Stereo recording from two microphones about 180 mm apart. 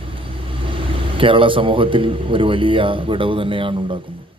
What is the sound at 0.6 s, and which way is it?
A man's voice, 30° right (ahead or behind).